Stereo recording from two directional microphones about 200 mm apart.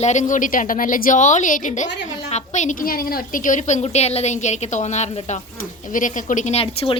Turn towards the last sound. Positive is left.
turn(degrees=25)  # may be behind; listen again after turning